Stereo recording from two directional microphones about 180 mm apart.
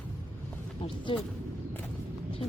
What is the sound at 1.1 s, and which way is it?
Speech, 30° left (ahead or behind).